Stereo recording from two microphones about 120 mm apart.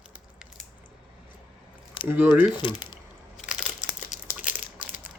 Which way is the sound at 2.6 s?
40° left (ahead or behind).